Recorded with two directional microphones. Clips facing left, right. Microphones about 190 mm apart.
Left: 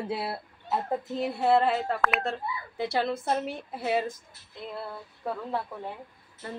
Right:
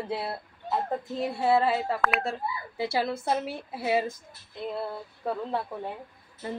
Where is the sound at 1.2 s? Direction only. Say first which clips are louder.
Even; centre (ahead or behind).